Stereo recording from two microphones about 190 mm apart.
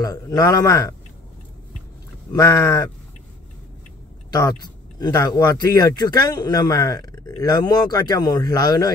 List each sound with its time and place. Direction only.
0.0 s speech: 20° left (ahead or behind)
2.3 s speech: 15° left (ahead or behind)
4.3 s speech: 20° left (ahead or behind)